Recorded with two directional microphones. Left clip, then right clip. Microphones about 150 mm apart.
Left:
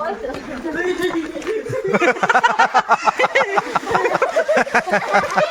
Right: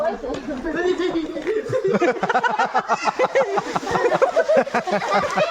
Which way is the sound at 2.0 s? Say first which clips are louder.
Left 5 dB; 15° left (ahead or behind).